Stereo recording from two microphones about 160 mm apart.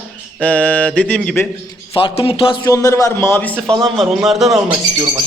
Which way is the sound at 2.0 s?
35° left (ahead or behind).